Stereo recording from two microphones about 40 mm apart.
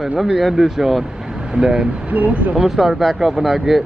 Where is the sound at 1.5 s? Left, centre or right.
Right.